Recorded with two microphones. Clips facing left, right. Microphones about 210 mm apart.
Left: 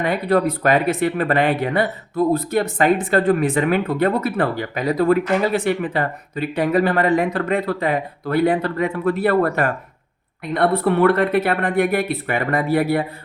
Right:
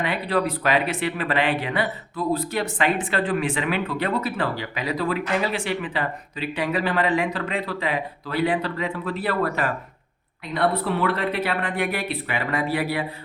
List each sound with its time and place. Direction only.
0.0 s speech: 45° left (ahead or behind)